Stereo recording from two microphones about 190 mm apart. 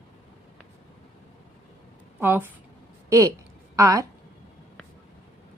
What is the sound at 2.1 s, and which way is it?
A woman's voice, 10° right (ahead or behind).